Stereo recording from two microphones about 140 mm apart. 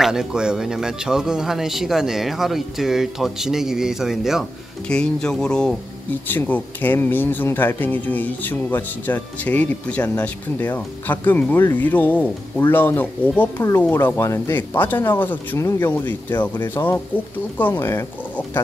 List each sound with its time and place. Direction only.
0.0 s speech: 5° right (ahead or behind); by 18.4 s 15° left (ahead or behind)